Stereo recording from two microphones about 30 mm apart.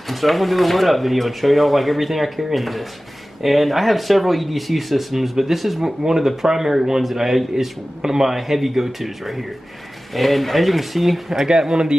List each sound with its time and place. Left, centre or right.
0.1 s speech: centre
8.0 s speech: centre
11.3 s speech: right